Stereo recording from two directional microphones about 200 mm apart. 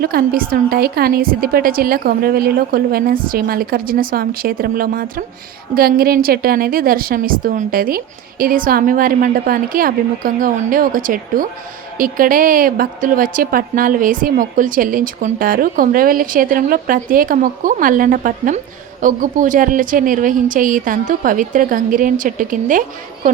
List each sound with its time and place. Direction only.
0.0 s a woman's voice: 50° right (ahead or behind)